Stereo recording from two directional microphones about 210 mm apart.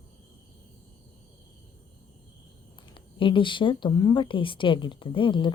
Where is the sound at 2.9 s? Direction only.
25° left (ahead or behind).